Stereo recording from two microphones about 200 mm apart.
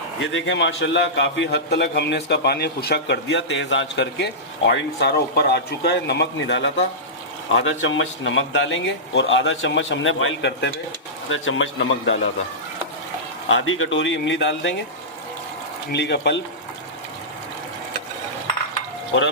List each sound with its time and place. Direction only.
0.2 s a man's voice: 70° left (ahead or behind)
13.5 s speech: 80° left
15.9 s a man's voice: 60° left (ahead or behind)